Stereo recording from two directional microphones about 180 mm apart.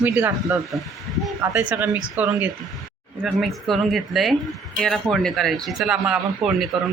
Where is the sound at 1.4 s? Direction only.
10° right (ahead or behind).